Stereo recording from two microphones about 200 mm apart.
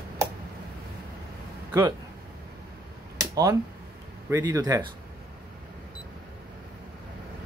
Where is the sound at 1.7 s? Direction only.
10° right (ahead or behind).